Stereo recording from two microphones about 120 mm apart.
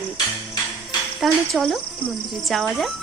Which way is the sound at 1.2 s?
Centre (ahead or behind).